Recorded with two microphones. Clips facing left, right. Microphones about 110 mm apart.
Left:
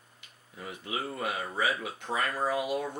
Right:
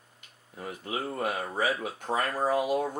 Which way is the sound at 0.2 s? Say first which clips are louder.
Right 3 dB; 45° right (ahead or behind).